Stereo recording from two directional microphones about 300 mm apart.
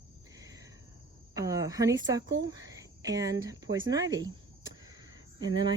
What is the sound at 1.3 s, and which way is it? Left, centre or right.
Speech, centre.